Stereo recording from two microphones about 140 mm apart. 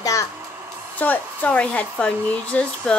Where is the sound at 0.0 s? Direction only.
25° left (ahead or behind).